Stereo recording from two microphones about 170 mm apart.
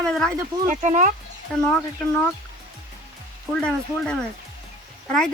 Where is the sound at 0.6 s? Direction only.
45° right (ahead or behind).